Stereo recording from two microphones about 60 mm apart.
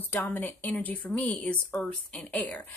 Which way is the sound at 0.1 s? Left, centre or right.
Left.